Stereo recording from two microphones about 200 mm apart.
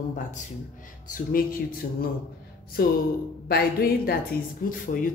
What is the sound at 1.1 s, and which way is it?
Speech, 45° left (ahead or behind).